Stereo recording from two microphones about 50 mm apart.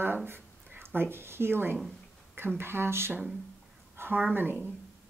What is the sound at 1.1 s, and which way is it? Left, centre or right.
Speech, right.